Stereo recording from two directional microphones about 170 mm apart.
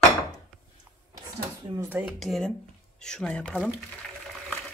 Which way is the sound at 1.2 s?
20° right (ahead or behind).